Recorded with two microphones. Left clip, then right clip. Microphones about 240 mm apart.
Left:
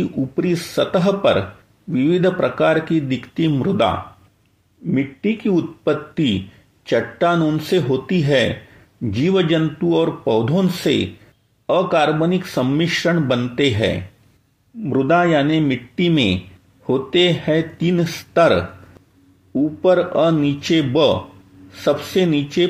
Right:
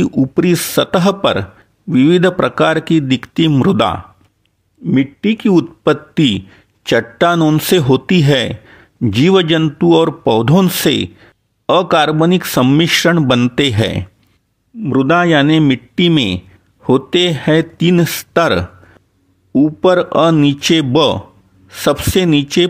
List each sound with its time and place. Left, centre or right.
0.0 s a man's voice: right